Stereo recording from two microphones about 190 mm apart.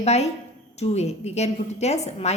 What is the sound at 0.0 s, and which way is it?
A woman's voice, 35° left (ahead or behind).